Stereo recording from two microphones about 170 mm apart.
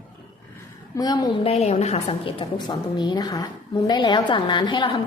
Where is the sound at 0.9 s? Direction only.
20° left (ahead or behind).